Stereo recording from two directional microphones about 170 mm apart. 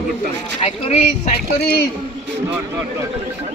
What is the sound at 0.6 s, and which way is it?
Speech, 35° left (ahead or behind).